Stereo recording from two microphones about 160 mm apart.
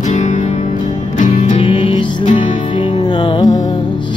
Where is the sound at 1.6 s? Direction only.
30° left (ahead or behind).